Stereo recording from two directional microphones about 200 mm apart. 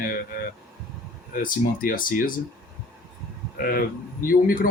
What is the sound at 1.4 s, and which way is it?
Speech, 45° left (ahead or behind).